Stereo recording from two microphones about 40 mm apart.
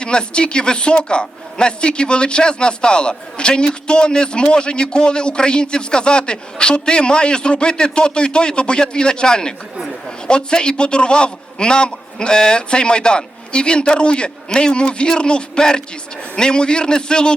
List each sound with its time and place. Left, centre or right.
0.0 s a man's voice: left